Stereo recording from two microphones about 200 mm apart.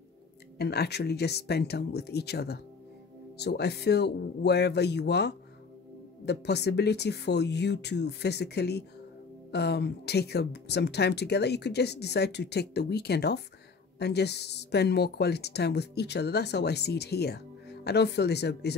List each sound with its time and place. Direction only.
0.6 s a woman's voice: 55° left (ahead or behind)